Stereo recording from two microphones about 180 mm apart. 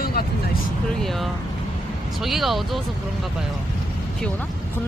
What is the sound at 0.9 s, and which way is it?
Speech, centre (ahead or behind).